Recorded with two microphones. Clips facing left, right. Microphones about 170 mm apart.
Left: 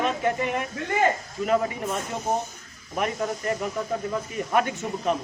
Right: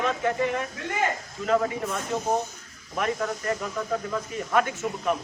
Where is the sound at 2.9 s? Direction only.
20° left (ahead or behind).